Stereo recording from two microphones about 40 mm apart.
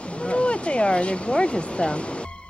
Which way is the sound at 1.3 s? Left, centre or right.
Left.